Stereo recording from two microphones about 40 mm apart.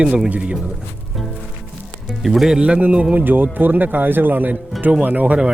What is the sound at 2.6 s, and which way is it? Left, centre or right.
Speech, right.